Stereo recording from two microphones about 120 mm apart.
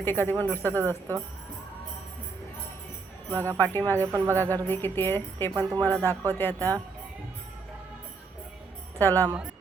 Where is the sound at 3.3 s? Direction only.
20° right (ahead or behind).